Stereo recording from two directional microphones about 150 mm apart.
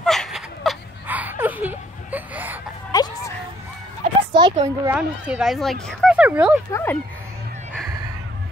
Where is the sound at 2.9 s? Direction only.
25° left (ahead or behind).